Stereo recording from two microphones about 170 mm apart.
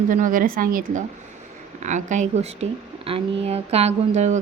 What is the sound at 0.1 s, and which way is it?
A woman's voice, 50° right (ahead or behind).